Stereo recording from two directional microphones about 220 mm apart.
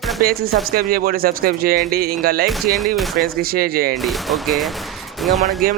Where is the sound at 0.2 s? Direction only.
40° right (ahead or behind).